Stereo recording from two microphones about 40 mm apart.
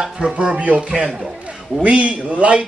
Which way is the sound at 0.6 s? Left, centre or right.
Right.